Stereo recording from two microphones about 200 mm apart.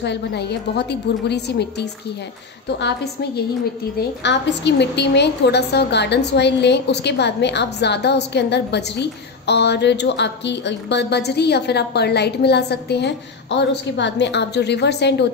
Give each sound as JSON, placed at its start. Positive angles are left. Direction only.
{"t": 0.0, "sound": "a woman's voice", "side_deg": 55}